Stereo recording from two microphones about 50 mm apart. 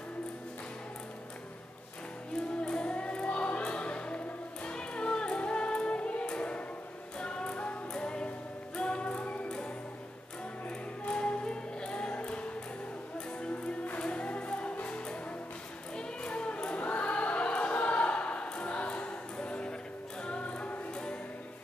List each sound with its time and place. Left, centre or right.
2.6 s music: centre
11.1 s music: left
16.0 s choir: centre
20.2 s music: left